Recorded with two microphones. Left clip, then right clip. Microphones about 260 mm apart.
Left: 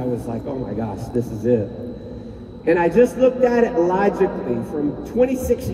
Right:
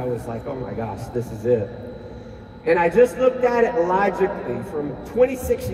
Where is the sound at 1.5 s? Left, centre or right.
Right.